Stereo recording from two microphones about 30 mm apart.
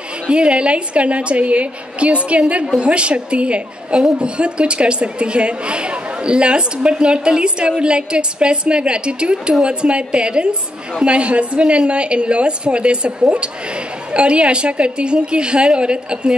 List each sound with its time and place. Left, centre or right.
0.3 s a woman's voice: right